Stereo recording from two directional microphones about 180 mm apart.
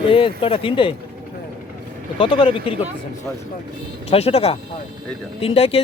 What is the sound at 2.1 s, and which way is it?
Speech, 30° left (ahead or behind).